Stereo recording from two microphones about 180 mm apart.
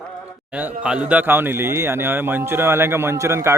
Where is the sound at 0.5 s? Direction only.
5° right (ahead or behind).